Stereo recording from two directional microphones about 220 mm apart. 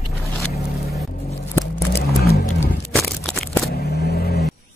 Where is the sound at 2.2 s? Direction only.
45° left (ahead or behind).